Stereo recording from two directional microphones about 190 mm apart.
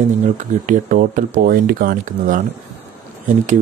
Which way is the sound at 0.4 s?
45° right (ahead or behind).